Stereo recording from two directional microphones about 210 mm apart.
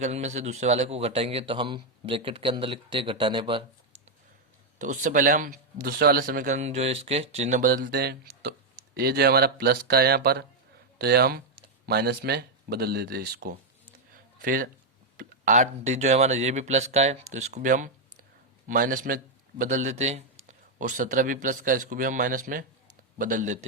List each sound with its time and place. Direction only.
0.0 s a man's voice: 35° right (ahead or behind)
4.8 s speech: 35° right (ahead or behind)
14.1 s a sound: 40° right (ahead or behind)
15.2 s speech: 35° right (ahead or behind)